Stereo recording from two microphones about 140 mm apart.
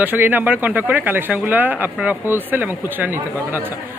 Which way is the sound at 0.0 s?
15° right (ahead or behind).